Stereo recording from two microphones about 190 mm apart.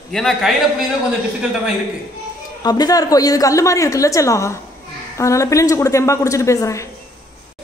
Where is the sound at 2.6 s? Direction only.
20° left (ahead or behind).